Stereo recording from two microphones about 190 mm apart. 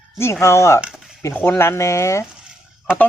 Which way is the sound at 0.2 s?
15° left (ahead or behind).